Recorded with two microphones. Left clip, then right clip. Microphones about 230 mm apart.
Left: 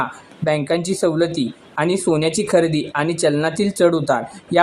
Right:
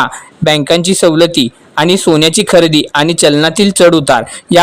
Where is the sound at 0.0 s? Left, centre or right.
Right.